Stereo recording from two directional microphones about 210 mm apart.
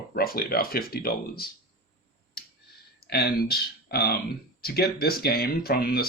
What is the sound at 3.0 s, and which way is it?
Speech, 50° left (ahead or behind).